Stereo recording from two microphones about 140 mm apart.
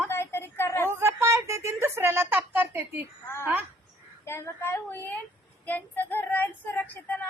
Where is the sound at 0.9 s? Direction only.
15° right (ahead or behind).